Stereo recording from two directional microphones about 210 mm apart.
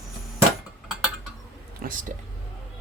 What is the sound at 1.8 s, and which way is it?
Speech, 45° right (ahead or behind).